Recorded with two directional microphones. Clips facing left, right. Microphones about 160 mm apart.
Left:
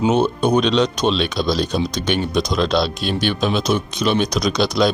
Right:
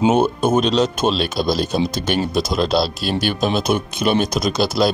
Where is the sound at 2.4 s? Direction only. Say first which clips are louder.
Even; 40° right (ahead or behind).